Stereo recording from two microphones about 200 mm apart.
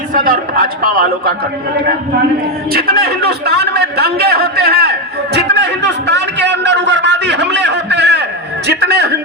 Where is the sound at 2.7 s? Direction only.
50° right (ahead or behind).